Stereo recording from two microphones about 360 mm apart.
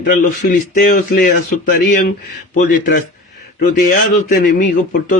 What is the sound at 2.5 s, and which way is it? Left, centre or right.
Speech, left.